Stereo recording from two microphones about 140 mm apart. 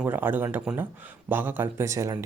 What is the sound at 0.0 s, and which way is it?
Speech, 15° right (ahead or behind).